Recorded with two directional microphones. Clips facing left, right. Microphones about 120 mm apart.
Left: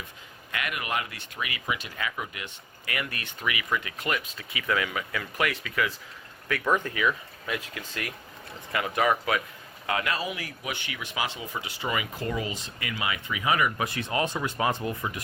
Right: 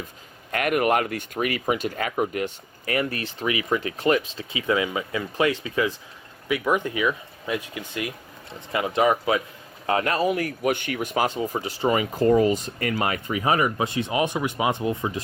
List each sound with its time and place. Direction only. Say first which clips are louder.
0.5 s speech: right 10 dB; 50° right (ahead or behind); by 5.9 s 25° right (ahead or behind)
6.5 s speech: right 3 dB; 15° right (ahead or behind)
9.8 s speech: right 7 dB; 35° right (ahead or behind)